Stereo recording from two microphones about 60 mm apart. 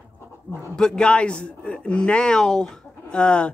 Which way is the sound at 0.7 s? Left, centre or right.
Centre.